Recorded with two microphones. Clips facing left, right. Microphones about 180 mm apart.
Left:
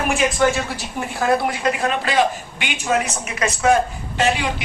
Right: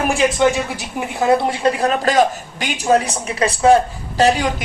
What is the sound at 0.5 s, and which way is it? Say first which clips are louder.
A woman's voice: right 2 dB; 15° right (ahead or behind).